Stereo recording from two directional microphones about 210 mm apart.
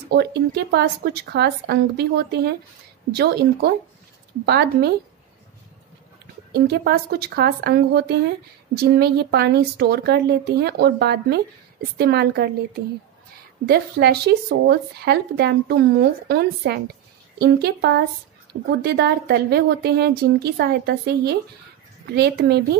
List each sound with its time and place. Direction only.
0.1 s speech: 50° right (ahead or behind)
6.5 s speech: 50° right (ahead or behind)
13.7 s speech: 50° right (ahead or behind)